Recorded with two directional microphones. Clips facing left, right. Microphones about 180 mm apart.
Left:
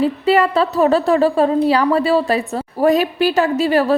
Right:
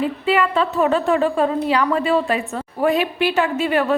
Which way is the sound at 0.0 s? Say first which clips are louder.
Left 4 dB; 40° left (ahead or behind).